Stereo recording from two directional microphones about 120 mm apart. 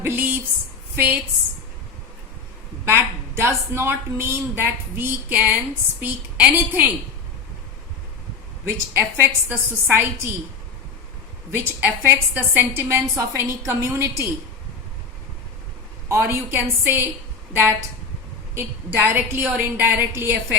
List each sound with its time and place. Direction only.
0.0 s a sound: 15° right (ahead or behind)
0.9 s a woman's voice: 15° right (ahead or behind)
2.8 s a woman's voice: 20° right (ahead or behind)
8.6 s a woman's voice: 20° right (ahead or behind)
11.5 s a woman's voice: 15° right (ahead or behind)
16.1 s a woman's voice: 15° right (ahead or behind)